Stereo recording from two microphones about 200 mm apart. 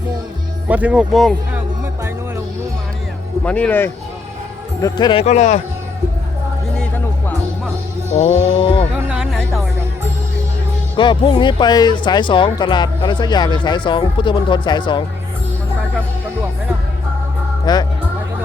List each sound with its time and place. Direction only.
0.7 s speech: 5° right (ahead or behind)
3.4 s speech: 5° left (ahead or behind)
4.8 s speech: 20° left (ahead or behind)
5.2 s speech: 35° left (ahead or behind)
8.2 s speech: 30° left (ahead or behind)
9.0 s music: 5° right (ahead or behind)
10.9 s speech: 20° left (ahead or behind)
17.7 s speech: 20° left (ahead or behind)